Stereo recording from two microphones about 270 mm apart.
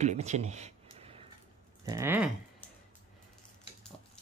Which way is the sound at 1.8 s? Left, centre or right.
Centre.